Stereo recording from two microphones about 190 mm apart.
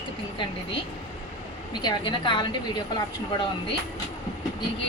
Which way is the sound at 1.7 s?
20° left (ahead or behind).